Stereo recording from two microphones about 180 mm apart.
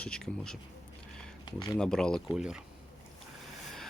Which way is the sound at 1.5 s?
25° left (ahead or behind).